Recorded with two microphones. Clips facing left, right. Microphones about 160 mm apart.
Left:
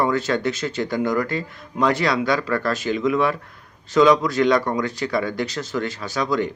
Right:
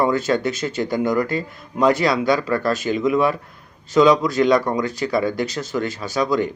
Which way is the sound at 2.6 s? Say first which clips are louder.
Right 2 dB; 40° right (ahead or behind).